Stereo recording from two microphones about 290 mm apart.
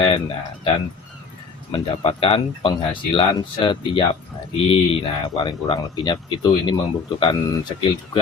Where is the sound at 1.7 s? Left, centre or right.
Centre.